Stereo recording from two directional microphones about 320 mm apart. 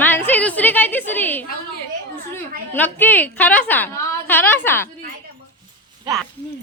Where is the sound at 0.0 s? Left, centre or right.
Centre.